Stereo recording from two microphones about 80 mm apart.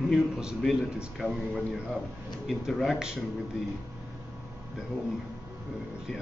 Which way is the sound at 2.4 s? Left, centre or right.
Centre.